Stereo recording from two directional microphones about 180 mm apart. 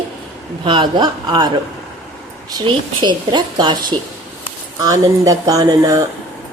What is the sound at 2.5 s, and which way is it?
A woman's voice, 25° right (ahead or behind).